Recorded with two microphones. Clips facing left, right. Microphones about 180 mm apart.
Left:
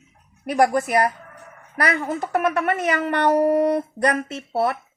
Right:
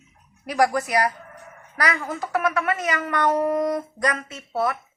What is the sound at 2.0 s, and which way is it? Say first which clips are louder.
Speech: left 4 dB; 25° left (ahead or behind).